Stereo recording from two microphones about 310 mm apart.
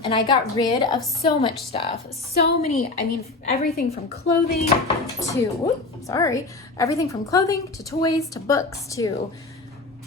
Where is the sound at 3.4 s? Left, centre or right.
Left.